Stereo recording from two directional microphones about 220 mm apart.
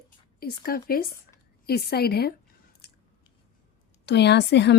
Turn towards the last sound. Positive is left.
turn(degrees=50)  # may be behind; listen again after turning